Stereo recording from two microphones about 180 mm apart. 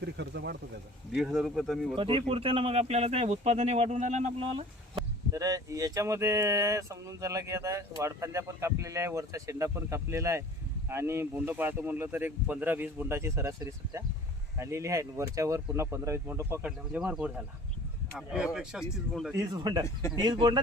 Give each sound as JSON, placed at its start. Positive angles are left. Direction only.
{"t": 0.0, "sound": "speech", "side_deg": -70}
{"t": 1.1, "sound": "speech", "side_deg": 0}
{"t": 2.0, "sound": "speech", "side_deg": -30}
{"t": 5.3, "sound": "speech", "side_deg": -20}
{"t": 19.5, "sound": "speech", "side_deg": -25}
{"t": 19.8, "sound": "speech", "side_deg": 15}
{"t": 20.2, "sound": "speech", "side_deg": -25}